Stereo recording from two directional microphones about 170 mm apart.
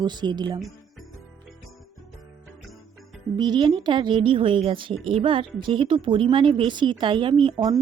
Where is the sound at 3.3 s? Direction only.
25° right (ahead or behind).